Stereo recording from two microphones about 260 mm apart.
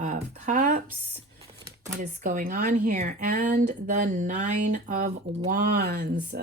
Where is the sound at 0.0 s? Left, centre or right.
Right.